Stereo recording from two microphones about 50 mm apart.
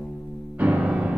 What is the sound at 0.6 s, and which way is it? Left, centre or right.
Music, right.